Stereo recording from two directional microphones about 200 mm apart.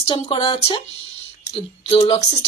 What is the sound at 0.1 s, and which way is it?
Speech, 25° left (ahead or behind).